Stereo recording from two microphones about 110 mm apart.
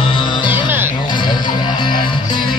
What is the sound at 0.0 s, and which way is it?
Music, 45° left (ahead or behind).